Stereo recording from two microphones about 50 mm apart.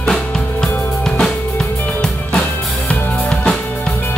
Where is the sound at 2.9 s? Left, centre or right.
Centre.